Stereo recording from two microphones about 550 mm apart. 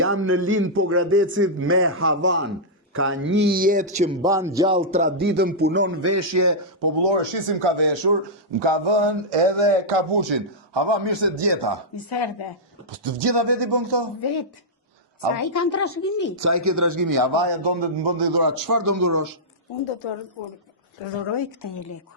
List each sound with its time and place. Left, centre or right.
0.0 s a man's voice: right
7.0 s a man's voice: right
13.0 s a man's voice: right
14.2 s a woman's voice: left
15.4 s speech: left
16.3 s a man's voice: right
21.6 s speech: left